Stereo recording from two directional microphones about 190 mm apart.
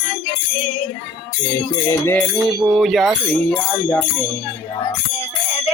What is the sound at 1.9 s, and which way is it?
Music, 10° left (ahead or behind).